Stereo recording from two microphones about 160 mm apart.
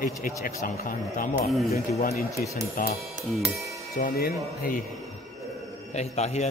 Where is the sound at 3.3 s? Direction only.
Centre (ahead or behind).